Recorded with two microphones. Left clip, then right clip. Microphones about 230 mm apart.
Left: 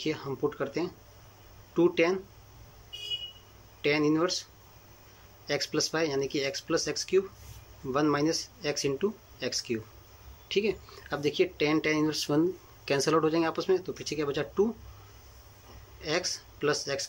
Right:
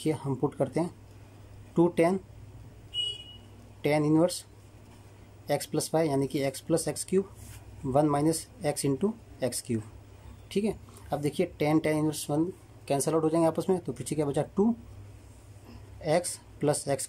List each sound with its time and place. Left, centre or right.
0.0 s speech: right
3.8 s speech: right
5.5 s speech: right
16.0 s speech: right